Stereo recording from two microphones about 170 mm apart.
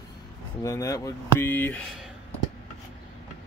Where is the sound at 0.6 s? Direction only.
20° left (ahead or behind).